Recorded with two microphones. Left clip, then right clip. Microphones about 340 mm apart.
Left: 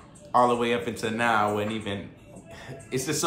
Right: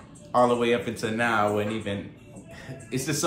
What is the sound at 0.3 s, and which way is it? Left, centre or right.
A man's voice, centre.